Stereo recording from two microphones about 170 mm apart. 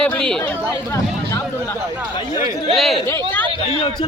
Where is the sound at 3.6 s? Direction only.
30° left (ahead or behind).